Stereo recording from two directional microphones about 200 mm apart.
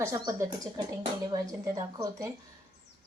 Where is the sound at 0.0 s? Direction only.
15° right (ahead or behind).